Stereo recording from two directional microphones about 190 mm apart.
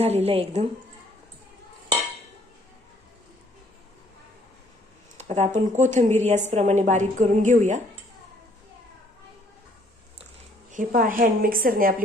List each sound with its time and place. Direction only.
0.0 s a woman's voice: 35° right (ahead or behind)
5.1 s a woman's voice: 35° right (ahead or behind)
10.7 s a woman's voice: 45° right (ahead or behind)